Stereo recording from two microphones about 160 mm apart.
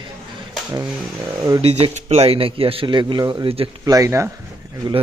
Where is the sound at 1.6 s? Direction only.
40° right (ahead or behind).